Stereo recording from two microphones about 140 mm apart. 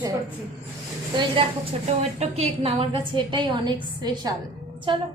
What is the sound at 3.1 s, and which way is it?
A woman's voice, 35° right (ahead or behind).